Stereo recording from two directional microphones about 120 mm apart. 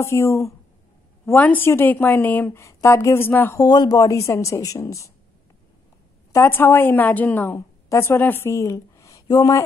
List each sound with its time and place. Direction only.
0.0 s a woman's voice: 25° left (ahead or behind)
3.6 s speech: 35° left (ahead or behind)
6.3 s a woman's voice: 20° left (ahead or behind)